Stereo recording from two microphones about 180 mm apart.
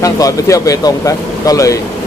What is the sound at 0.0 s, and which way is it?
Speech, 20° left (ahead or behind).